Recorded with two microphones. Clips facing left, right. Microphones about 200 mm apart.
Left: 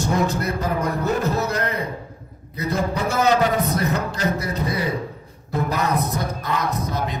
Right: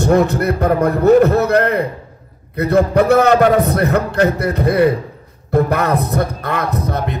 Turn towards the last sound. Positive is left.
turn(degrees=-60)  # may be behind; listen again after turning